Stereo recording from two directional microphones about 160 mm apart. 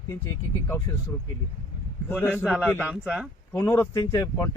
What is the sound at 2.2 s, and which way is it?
Speech, 10° left (ahead or behind).